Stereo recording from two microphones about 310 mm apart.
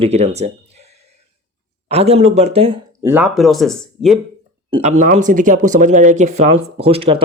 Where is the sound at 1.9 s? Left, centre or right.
Centre.